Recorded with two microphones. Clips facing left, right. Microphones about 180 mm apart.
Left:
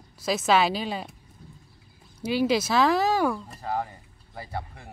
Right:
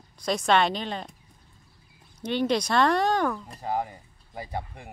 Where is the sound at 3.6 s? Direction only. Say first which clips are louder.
Right 1 dB; 15° right (ahead or behind).